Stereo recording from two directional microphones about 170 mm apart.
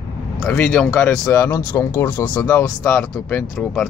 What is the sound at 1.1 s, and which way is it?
Speech, 15° left (ahead or behind).